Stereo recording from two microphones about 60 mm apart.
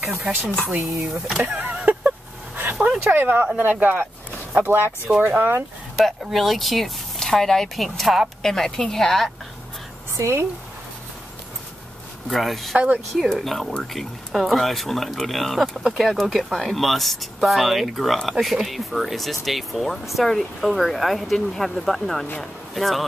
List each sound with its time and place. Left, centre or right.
0.9 s speech: centre
1.4 s a sound: right
3.0 s speech: right
5.2 s speech: right
5.9 s speech: centre
10.1 s speech: right
12.3 s speech: centre
12.7 s speech: right
13.3 s speech: centre